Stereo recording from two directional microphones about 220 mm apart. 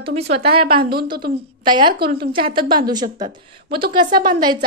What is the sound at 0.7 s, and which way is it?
Speech, 45° right (ahead or behind).